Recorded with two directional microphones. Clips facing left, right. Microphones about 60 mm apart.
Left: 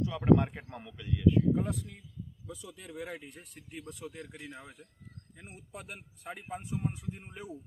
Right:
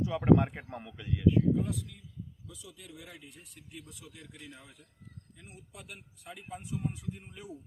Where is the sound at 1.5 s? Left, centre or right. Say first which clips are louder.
Even; left.